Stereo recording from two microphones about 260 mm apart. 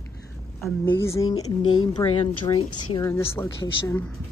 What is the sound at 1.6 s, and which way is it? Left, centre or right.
Speech, left.